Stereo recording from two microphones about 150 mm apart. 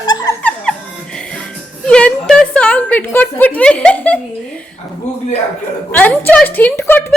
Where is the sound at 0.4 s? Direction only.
5° left (ahead or behind).